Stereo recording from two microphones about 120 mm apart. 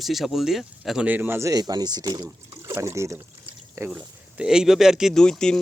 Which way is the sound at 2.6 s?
20° right (ahead or behind).